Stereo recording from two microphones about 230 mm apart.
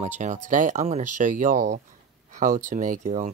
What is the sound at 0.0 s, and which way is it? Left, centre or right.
Speech, right.